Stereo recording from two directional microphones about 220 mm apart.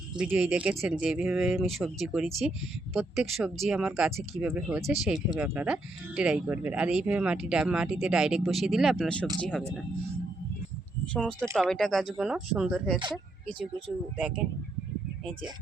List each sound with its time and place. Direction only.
0.2 s speech: 5° right (ahead or behind)
11.1 s speech: 5° left (ahead or behind)
13.0 s speech: 20° right (ahead or behind)